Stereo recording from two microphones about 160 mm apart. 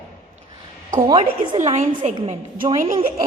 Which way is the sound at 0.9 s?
30° right (ahead or behind).